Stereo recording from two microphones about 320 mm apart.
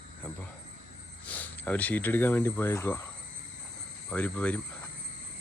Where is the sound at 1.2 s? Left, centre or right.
Centre.